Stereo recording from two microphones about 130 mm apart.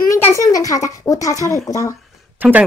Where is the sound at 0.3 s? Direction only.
25° left (ahead or behind).